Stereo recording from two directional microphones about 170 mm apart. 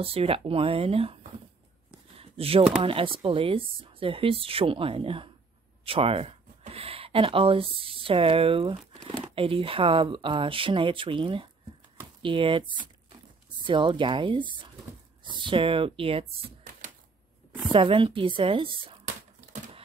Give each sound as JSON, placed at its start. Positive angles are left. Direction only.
{"t": 0.0, "sound": "speech", "side_deg": -35}
{"t": 2.1, "sound": "a sound", "side_deg": -35}
{"t": 2.8, "sound": "speech", "side_deg": -30}
{"t": 13.7, "sound": "speech", "side_deg": -30}
{"t": 17.6, "sound": "speech", "side_deg": -30}